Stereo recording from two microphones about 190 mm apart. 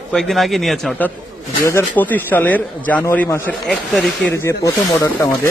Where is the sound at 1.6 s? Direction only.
15° left (ahead or behind).